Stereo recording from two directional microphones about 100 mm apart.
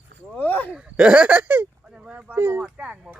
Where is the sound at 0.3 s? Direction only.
15° left (ahead or behind).